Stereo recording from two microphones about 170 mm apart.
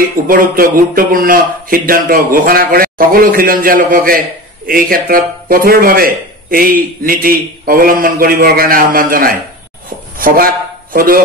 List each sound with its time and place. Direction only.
0.3 s a man's voice: 55° right (ahead or behind)